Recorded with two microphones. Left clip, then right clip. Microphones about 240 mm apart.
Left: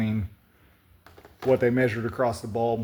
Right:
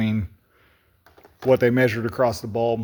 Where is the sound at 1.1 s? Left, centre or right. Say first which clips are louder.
Left 1 dB; right.